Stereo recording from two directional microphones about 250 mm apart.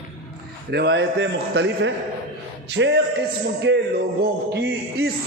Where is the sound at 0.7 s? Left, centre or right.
Right.